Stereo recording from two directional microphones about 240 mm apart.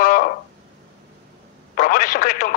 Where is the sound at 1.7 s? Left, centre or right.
Left.